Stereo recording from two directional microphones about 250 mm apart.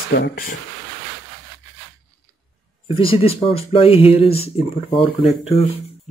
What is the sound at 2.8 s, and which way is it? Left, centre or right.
Speech, left.